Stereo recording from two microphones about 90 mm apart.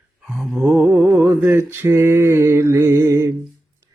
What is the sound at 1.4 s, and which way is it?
Mantra, 25° right (ahead or behind).